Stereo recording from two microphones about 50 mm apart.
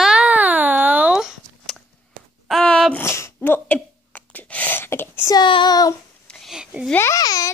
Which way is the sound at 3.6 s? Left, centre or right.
Left.